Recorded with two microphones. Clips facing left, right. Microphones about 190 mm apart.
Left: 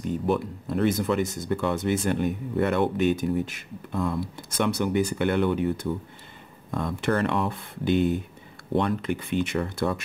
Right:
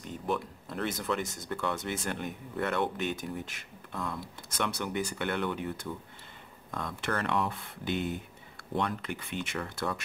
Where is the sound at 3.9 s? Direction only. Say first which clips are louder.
Left 9 dB; 25° left (ahead or behind).